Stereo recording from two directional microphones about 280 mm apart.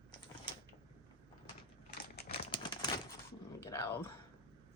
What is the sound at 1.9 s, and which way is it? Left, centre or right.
Typing, left.